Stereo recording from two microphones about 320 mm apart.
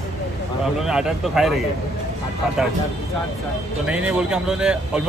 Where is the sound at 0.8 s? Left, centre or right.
Centre.